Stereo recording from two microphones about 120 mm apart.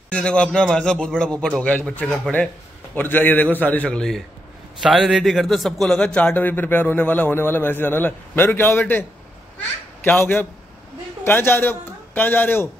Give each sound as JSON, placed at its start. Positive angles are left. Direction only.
{"t": 0.1, "sound": "a man's voice", "side_deg": 10}